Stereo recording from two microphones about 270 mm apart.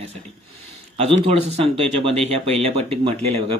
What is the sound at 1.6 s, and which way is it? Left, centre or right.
Speech, right.